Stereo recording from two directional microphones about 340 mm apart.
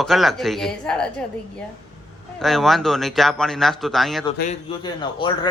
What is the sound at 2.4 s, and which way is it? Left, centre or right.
A man's voice, centre.